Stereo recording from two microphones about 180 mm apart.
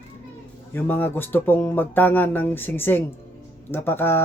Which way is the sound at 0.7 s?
10° left (ahead or behind).